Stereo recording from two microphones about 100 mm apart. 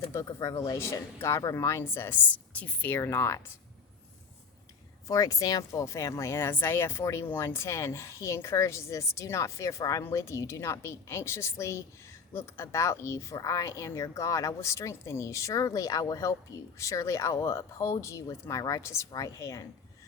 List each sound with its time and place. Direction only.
0.1 s speech: 35° left (ahead or behind)
5.0 s speech: 35° left (ahead or behind)